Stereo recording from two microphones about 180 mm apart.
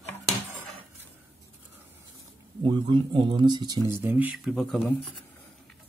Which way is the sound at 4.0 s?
10° right (ahead or behind).